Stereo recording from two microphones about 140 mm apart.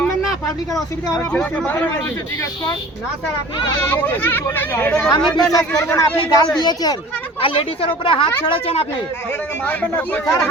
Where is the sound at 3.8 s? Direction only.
15° left (ahead or behind).